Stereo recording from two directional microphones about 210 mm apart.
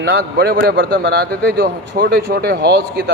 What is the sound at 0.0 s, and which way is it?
A man's voice, 50° right (ahead or behind).